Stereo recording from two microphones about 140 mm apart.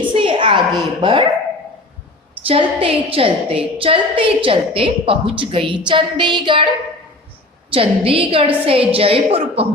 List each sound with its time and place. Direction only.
0.0 s a woman's voice: 35° right (ahead or behind)
2.5 s a woman's voice: 40° right (ahead or behind)
7.7 s a woman's voice: 40° right (ahead or behind)